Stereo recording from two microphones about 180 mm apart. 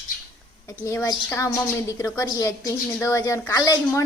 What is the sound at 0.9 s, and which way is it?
A woman's voice, 15° left (ahead or behind).